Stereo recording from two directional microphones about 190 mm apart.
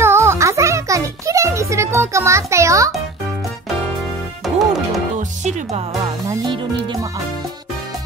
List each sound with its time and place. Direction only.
0.0 s music: 15° right (ahead or behind)
5.4 s music: 35° right (ahead or behind)
6.2 s music: 25° right (ahead or behind)